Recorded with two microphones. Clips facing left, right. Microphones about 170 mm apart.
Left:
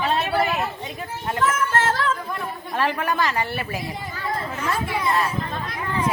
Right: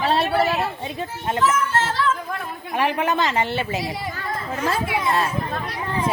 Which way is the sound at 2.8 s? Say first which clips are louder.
Right 2 dB; 20° right (ahead or behind).